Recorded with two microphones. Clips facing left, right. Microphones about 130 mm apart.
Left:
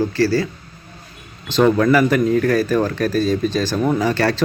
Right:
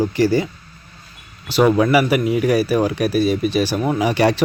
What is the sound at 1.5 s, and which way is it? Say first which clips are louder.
Speech: even; 10° right (ahead or behind).